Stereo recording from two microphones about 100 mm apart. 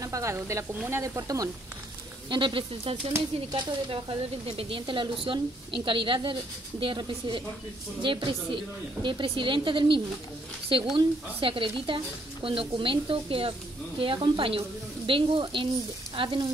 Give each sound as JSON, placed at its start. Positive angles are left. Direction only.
{"t": 0.0, "sound": "speech", "side_deg": -30}
{"t": 2.2, "sound": "speech", "side_deg": -50}